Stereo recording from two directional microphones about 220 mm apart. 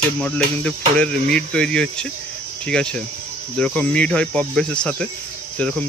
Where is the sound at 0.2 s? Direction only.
5° left (ahead or behind).